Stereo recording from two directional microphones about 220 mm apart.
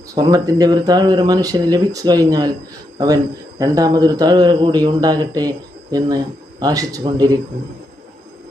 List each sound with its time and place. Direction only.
0.1 s speech: 15° right (ahead or behind)
3.6 s speech: 15° right (ahead or behind)